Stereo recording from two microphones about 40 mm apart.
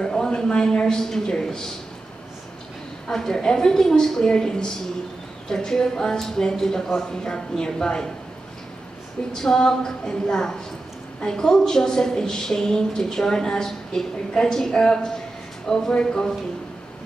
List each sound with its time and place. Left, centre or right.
0.0 s a man's voice: centre
3.1 s a woman's voice: centre
9.3 s a woman's voice: centre